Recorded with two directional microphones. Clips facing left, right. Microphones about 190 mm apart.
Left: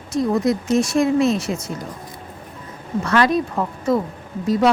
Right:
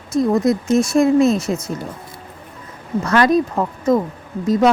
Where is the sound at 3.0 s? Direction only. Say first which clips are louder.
Right 3 dB; 45° right (ahead or behind).